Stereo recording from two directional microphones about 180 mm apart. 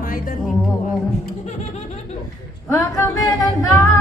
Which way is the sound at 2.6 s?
15° left (ahead or behind).